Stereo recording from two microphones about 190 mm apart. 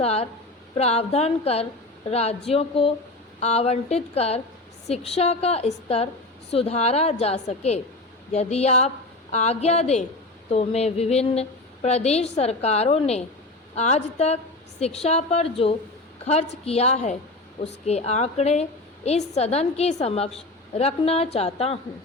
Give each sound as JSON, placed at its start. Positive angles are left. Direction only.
{"t": 0.0, "sound": "a woman's voice", "side_deg": 35}